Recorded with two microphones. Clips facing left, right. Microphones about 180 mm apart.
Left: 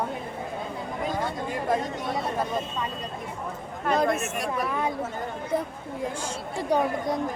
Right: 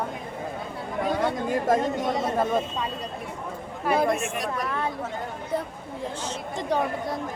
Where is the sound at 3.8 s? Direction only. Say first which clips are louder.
Right 1 dB; 5° right (ahead or behind); by 4.9 s 10° left (ahead or behind).